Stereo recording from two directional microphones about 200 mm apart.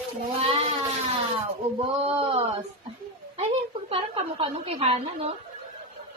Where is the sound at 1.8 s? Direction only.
30° right (ahead or behind).